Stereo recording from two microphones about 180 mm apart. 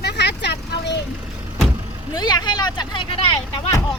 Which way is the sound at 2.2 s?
25° left (ahead or behind).